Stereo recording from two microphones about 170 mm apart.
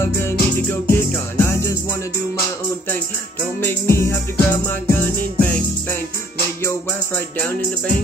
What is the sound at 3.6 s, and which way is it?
Music, 15° left (ahead or behind).